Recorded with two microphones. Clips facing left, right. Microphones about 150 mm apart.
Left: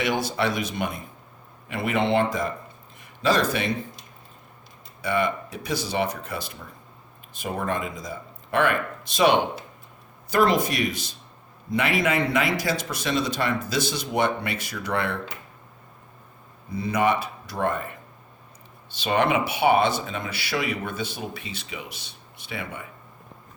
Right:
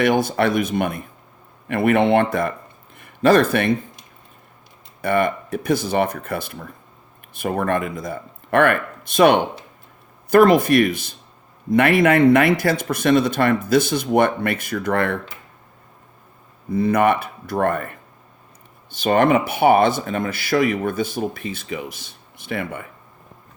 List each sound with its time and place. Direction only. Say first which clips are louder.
0.0 s speech: right 7 dB; 50° right (ahead or behind)
5.0 s speech: right 5 dB; 55° right (ahead or behind)
16.6 s speech: right 6 dB; 50° right (ahead or behind)